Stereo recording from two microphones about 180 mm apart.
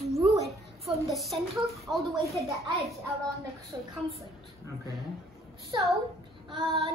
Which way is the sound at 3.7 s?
10° right (ahead or behind).